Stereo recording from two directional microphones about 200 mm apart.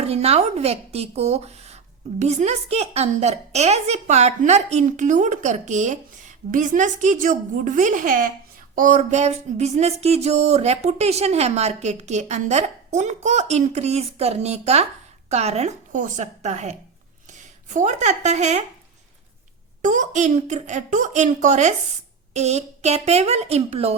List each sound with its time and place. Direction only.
0.0 s speech: 30° right (ahead or behind)
19.8 s speech: 40° right (ahead or behind)